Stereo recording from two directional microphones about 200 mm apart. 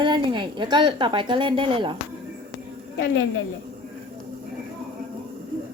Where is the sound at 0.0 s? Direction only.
25° right (ahead or behind).